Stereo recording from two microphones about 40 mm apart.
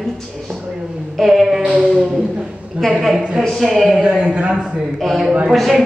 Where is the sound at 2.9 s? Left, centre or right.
Centre.